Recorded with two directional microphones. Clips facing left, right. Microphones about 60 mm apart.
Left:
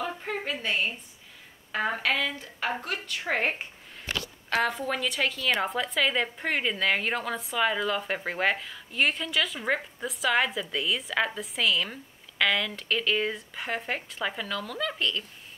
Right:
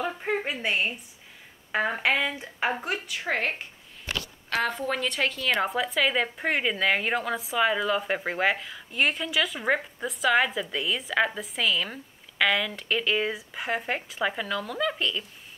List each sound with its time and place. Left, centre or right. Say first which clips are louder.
0.0 s a sound: right 4 dB; centre
1.9 s speech: right 1 dB; centre
4.5 s a woman's voice: even; centre